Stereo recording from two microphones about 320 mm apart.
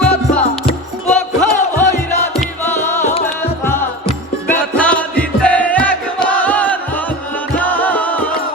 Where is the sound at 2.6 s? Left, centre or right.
Centre.